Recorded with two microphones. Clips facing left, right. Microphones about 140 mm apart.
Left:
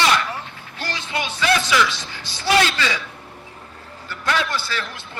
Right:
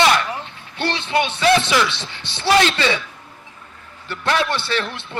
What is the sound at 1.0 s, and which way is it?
Speech, 65° right (ahead or behind).